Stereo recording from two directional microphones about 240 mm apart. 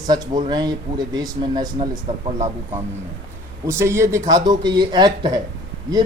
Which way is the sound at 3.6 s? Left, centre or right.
Centre.